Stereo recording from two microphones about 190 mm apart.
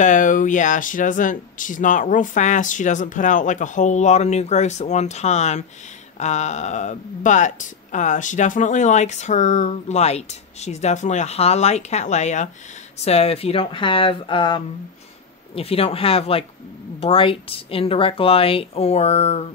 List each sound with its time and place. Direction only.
0.0 s speech: 40° left (ahead or behind)